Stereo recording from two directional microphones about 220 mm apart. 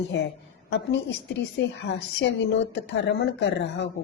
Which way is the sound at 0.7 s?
55° left (ahead or behind).